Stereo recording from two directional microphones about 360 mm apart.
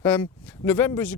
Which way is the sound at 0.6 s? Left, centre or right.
Centre.